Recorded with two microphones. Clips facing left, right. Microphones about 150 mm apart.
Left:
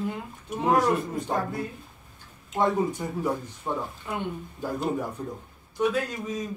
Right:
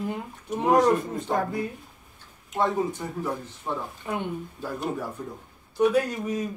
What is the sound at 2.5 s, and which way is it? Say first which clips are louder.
Speech: left 1 dB; 15° left (ahead or behind).